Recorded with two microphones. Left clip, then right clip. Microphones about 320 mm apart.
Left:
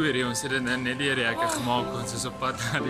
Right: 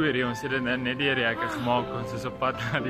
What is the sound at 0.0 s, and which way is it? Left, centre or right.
Speech, centre.